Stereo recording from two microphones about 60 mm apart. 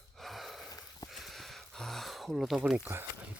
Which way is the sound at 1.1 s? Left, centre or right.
Centre.